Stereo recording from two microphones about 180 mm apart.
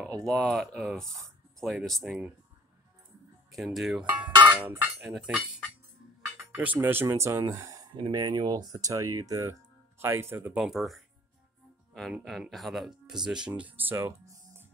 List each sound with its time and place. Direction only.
0.3 s speech: centre (ahead or behind)
3.5 s speech: centre (ahead or behind)